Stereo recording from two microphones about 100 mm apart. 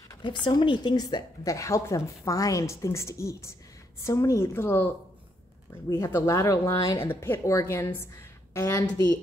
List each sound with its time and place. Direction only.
0.2 s a woman's voice: 50° left (ahead or behind); by 8.8 s 30° left (ahead or behind)